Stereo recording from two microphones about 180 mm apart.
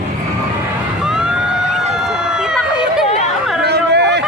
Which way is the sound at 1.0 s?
5° right (ahead or behind).